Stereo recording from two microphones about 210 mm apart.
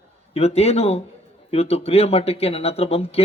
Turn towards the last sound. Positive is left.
turn(degrees=30)  # may be behind; listen again after turning